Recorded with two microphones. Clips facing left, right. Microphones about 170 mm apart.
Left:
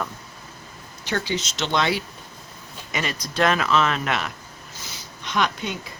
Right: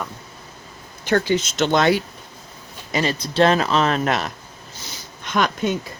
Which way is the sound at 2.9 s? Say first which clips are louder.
Right 6 dB; 30° right (ahead or behind).